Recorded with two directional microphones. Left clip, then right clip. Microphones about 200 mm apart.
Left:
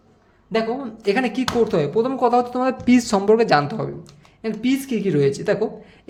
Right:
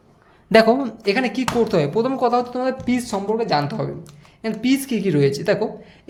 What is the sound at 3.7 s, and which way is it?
Speech, 5° left (ahead or behind).